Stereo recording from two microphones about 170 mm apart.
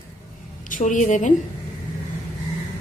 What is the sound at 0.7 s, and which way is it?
Speech, 50° left (ahead or behind).